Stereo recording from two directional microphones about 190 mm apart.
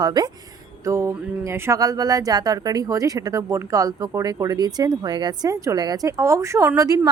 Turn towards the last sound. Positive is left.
turn(degrees=-20)  # may be behind; listen again after turning